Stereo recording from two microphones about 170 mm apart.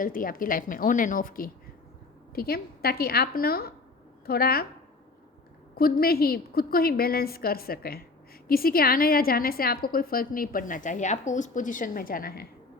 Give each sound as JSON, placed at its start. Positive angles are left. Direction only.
{"t": 0.0, "sound": "a woman's voice", "side_deg": 55}
{"t": 5.7, "sound": "a woman's voice", "side_deg": 60}